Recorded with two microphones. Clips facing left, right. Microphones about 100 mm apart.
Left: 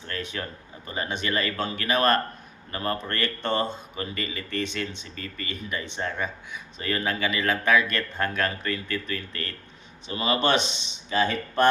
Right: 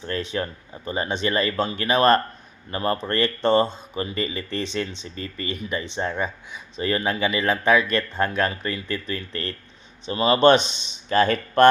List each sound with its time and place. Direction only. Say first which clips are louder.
0.1 s speech: right 6 dB; 25° right (ahead or behind)
11.1 s speech: right 5 dB; 55° right (ahead or behind)